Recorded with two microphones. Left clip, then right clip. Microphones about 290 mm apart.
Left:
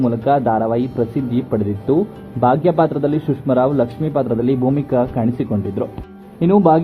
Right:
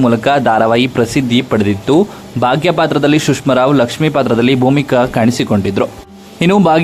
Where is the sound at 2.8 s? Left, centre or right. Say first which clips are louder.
Right 6 dB; right.